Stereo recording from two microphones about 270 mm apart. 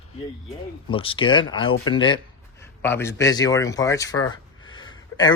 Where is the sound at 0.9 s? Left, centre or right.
Centre.